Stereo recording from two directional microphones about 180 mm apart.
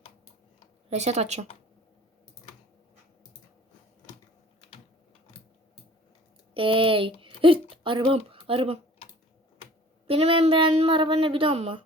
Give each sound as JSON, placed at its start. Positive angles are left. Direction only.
{"t": 0.9, "sound": "speech", "side_deg": -40}
{"t": 6.5, "sound": "speech", "side_deg": -30}
{"t": 10.1, "sound": "speech", "side_deg": -30}